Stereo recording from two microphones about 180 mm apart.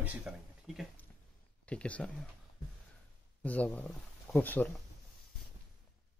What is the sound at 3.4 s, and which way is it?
Speech, 10° left (ahead or behind).